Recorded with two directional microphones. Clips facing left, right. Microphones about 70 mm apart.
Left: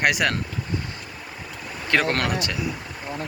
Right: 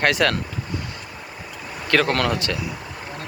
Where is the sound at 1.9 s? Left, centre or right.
Left.